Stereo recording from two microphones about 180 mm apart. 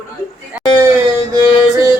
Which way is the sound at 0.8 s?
20° right (ahead or behind).